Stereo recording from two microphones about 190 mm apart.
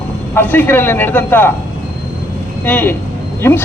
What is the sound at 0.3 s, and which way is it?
A man's voice, 10° left (ahead or behind).